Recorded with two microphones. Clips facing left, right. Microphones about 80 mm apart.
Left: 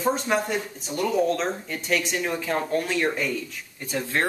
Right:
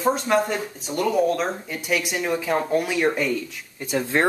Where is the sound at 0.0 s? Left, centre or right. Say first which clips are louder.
Right 3 dB; centre.